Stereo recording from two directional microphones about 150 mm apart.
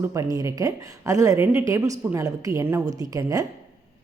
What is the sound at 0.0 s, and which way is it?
A woman's voice, 20° right (ahead or behind).